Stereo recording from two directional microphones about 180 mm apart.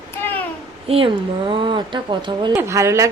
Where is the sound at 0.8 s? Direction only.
30° right (ahead or behind).